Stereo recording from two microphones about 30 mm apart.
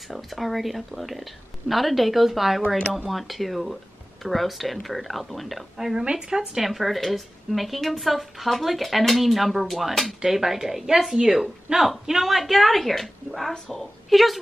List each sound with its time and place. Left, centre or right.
0.1 s speech: centre
5.8 s a woman's voice: centre